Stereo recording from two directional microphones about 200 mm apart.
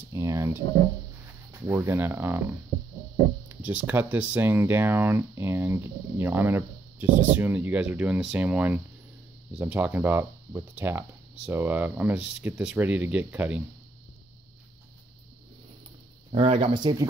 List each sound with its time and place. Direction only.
0.1 s a sound: 15° right (ahead or behind)
1.5 s speech: 10° right (ahead or behind)
3.4 s speech: 10° right (ahead or behind)
16.3 s speech: 30° right (ahead or behind)